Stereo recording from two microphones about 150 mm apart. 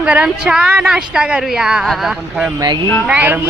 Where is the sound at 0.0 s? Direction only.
5° right (ahead or behind).